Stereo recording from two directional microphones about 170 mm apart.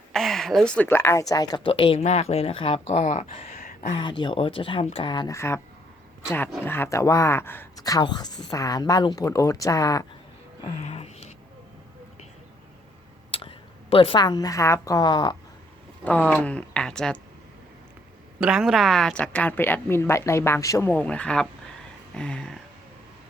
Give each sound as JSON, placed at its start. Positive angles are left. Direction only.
{"t": 0.1, "sound": "speech", "side_deg": 0}
{"t": 2.0, "sound": "speech", "side_deg": 40}
{"t": 4.2, "sound": "speech", "side_deg": 30}
{"t": 6.7, "sound": "speech", "side_deg": 15}
{"t": 10.8, "sound": "speech", "side_deg": 40}
{"t": 13.4, "sound": "a woman's voice", "side_deg": 30}
{"t": 16.0, "sound": "speech", "side_deg": 10}
{"t": 18.3, "sound": "speech", "side_deg": -5}
{"t": 22.1, "sound": "a sound", "side_deg": 5}